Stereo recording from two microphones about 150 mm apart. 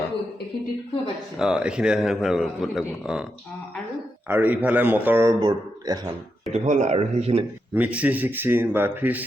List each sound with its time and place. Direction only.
1.4 s a man's voice: 5° right (ahead or behind)
4.3 s speech: 10° right (ahead or behind)
5.4 s speech: 30° right (ahead or behind)
6.5 s speech: 50° right (ahead or behind)
7.7 s speech: 10° right (ahead or behind)